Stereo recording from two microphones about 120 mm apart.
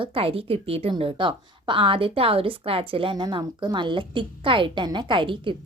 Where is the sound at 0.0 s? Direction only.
50° right (ahead or behind).